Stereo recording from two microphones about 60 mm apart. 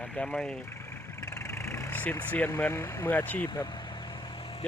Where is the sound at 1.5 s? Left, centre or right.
Left.